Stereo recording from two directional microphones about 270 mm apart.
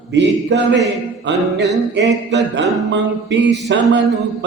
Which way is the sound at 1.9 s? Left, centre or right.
Right.